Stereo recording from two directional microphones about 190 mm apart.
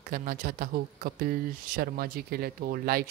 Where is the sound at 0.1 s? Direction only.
50° right (ahead or behind).